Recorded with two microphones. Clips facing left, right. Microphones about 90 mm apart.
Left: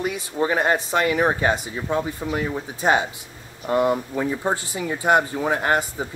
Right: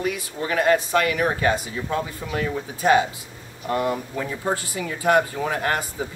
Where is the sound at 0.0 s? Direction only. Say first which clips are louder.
Left 3 dB; 25° left (ahead or behind).